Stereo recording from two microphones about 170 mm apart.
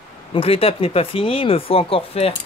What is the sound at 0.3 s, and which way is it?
Speech, 35° left (ahead or behind).